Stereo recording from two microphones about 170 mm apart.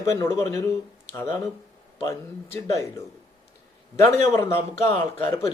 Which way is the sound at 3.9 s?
15° left (ahead or behind).